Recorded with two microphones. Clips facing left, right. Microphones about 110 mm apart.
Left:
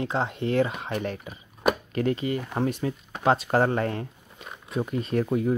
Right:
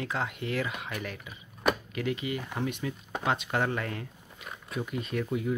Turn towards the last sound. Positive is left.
turn(degrees=45)  # may be behind; listen again after turning